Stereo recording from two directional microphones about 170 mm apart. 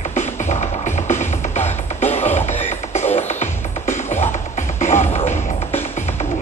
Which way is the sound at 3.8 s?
15° left (ahead or behind).